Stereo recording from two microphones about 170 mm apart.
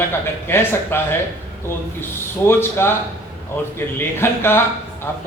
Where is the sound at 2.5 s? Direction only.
15° left (ahead or behind).